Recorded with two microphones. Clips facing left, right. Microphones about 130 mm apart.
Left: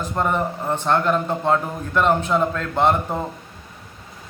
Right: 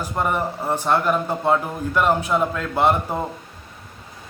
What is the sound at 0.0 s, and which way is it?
A man's voice, 5° right (ahead or behind).